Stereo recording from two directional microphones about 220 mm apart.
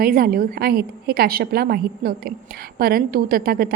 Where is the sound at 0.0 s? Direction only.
40° right (ahead or behind).